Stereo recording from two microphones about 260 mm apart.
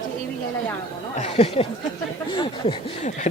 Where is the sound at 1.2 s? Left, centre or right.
Left.